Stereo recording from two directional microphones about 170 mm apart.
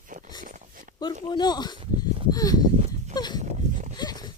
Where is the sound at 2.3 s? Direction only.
20° left (ahead or behind).